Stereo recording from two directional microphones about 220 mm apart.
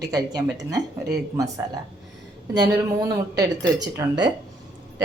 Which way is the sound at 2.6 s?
15° right (ahead or behind).